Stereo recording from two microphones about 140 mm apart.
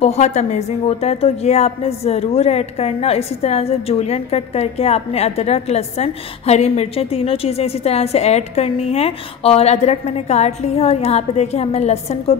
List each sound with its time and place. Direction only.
0.0 s a woman's voice: 55° left (ahead or behind)